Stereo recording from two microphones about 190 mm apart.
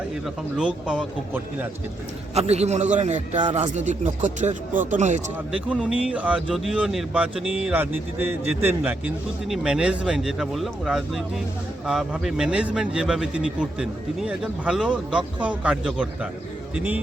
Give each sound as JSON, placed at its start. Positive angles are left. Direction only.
{"t": 0.5, "sound": "speech", "side_deg": -5}
{"t": 2.3, "sound": "speech", "side_deg": -35}
{"t": 5.5, "sound": "speech", "side_deg": -5}